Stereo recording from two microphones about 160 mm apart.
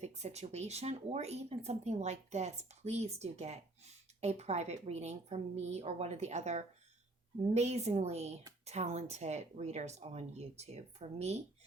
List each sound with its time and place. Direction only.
0.0 s speech: 45° right (ahead or behind)